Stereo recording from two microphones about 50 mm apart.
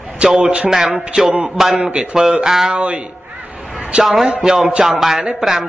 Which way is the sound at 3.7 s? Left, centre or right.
Right.